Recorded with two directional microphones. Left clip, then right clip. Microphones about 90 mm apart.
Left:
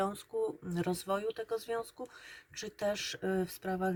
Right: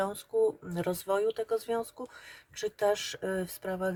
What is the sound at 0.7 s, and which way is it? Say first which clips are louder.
Speech: right 4 dB; 25° right (ahead or behind).